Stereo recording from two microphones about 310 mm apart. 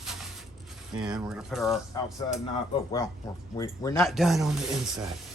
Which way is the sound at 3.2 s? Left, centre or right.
Centre.